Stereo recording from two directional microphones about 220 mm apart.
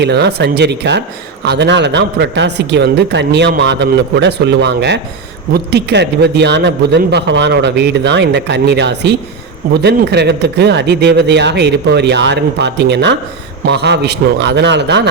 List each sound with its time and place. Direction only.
0.0 s a man's voice: 50° right (ahead or behind)